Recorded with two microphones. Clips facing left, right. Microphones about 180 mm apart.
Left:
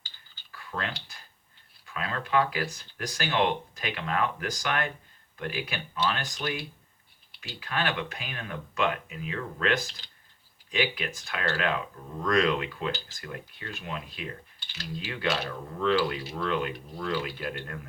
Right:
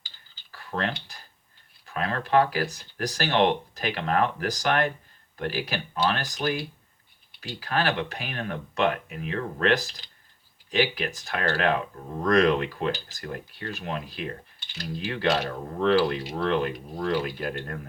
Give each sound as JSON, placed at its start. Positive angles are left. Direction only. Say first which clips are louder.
{"t": 0.5, "sound": "speech", "louder": "right 5 dB", "side_deg": -40}
{"t": 7.6, "sound": "speech", "louder": "right 4 dB", "side_deg": -35}